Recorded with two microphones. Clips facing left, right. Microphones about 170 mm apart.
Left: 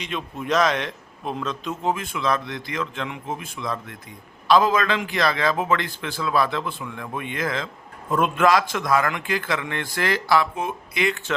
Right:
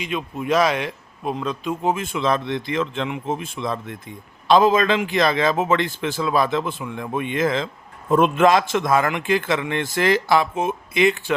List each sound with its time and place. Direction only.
0.0 s a man's voice: 5° right (ahead or behind)